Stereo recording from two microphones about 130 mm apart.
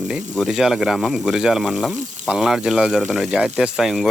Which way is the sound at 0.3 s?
5° right (ahead or behind).